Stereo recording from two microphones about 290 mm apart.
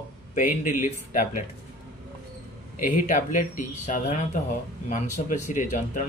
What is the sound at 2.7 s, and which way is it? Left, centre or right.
Speech, left.